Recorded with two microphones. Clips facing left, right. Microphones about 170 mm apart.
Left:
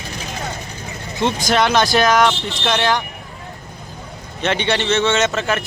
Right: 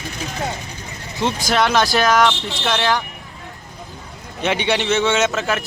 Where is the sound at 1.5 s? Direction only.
Centre (ahead or behind).